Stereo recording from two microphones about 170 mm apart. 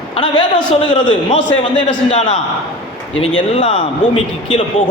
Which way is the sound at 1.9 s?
45° left (ahead or behind).